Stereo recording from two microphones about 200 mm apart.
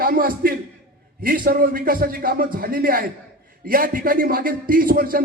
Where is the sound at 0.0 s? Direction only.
45° right (ahead or behind).